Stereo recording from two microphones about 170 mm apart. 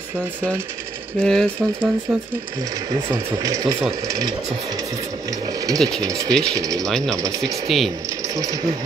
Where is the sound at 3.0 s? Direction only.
20° right (ahead or behind).